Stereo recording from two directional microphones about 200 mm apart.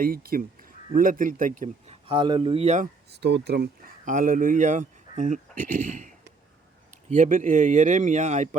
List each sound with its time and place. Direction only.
0.0 s speech: 45° right (ahead or behind)
2.0 s speech: 25° right (ahead or behind)
3.1 s speech: 55° right (ahead or behind); by 8.4 s 35° right (ahead or behind)